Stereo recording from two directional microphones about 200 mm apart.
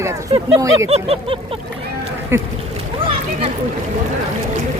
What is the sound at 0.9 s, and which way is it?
Vehicle, 30° right (ahead or behind).